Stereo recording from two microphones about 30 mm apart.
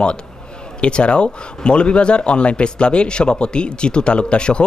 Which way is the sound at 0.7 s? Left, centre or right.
Left.